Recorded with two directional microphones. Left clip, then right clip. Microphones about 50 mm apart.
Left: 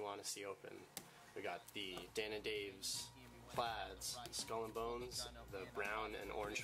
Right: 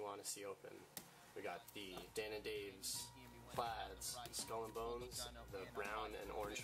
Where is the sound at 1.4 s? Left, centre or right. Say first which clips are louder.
Left 2 dB; left.